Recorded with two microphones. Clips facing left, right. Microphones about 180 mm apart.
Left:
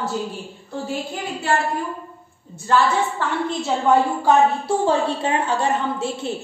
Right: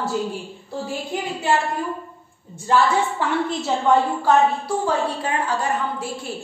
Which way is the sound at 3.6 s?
Centre (ahead or behind).